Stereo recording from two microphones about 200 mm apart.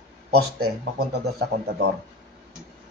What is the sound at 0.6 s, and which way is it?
Speech, 60° right (ahead or behind).